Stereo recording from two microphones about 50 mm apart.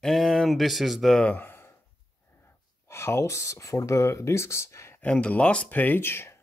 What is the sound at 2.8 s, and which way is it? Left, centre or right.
Speech, left.